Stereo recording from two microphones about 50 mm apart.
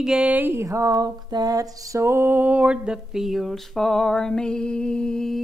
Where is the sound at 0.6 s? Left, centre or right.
Right.